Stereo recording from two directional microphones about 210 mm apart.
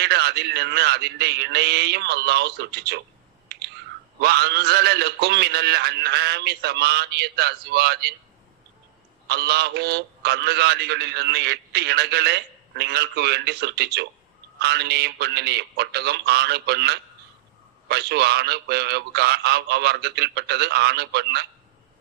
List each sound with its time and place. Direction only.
0.0 s a man's voice: 50° right (ahead or behind)
4.2 s a man's voice: 50° right (ahead or behind)
9.3 s a man's voice: 50° right (ahead or behind)